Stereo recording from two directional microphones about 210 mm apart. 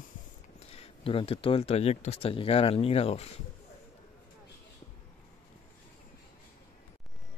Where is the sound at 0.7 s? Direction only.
25° left (ahead or behind).